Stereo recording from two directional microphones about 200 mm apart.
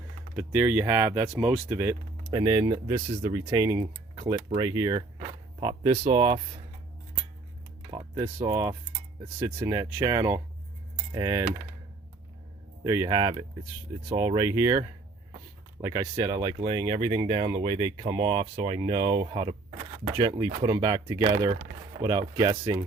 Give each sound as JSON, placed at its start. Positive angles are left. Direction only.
{"t": 0.3, "sound": "speech", "side_deg": -5}
{"t": 7.9, "sound": "computer keyboard", "side_deg": -20}
{"t": 8.4, "sound": "speech", "side_deg": -15}
{"t": 12.8, "sound": "speech", "side_deg": -15}